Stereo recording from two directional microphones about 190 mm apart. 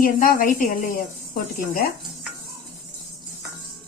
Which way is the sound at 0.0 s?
45° left (ahead or behind).